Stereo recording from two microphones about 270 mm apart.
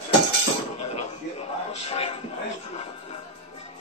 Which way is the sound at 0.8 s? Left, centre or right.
Left.